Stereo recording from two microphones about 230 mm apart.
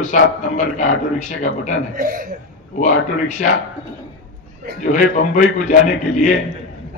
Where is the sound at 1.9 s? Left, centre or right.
Right.